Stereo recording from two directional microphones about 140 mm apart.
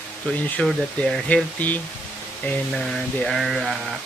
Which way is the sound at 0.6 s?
5° left (ahead or behind).